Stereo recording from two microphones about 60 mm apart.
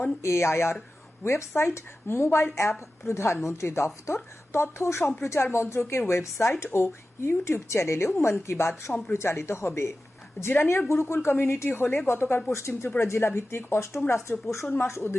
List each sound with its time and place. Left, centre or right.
0.2 s a woman's voice: left